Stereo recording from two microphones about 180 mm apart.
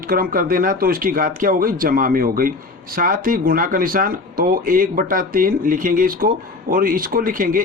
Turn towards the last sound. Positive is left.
turn(degrees=-50)  # may be behind; listen again after turning